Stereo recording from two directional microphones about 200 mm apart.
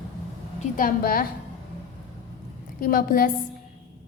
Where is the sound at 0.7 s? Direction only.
45° left (ahead or behind).